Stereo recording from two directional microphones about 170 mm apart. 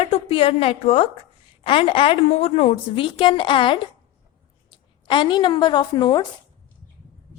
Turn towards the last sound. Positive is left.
turn(degrees=25)  # may be behind; listen again after turning